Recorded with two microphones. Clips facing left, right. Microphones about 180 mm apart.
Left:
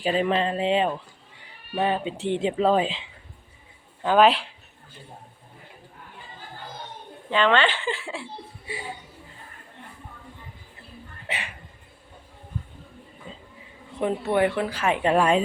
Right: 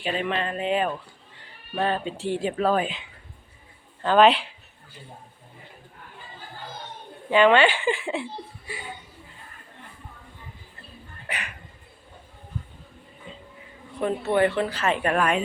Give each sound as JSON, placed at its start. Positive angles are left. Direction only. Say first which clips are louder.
{"t": 0.0, "sound": "speech", "louder": "left 4 dB", "side_deg": 35}
{"t": 1.4, "sound": "speech", "louder": "left 1 dB", "side_deg": 15}
{"t": 4.0, "sound": "speech", "louder": "right 1 dB", "side_deg": 10}
{"t": 7.3, "sound": "speech", "louder": "right 4 dB", "side_deg": -10}
{"t": 8.6, "sound": "speech", "louder": "left 3 dB", "side_deg": 25}
{"t": 11.3, "sound": "speech", "louder": "left 1 dB", "side_deg": 25}
{"t": 14.0, "sound": "speech", "louder": "even", "side_deg": 10}